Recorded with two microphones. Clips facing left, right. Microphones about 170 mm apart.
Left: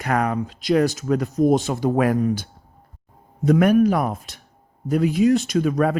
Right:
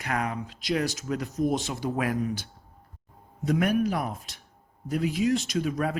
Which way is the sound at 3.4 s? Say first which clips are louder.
Left 9 dB; 55° left (ahead or behind).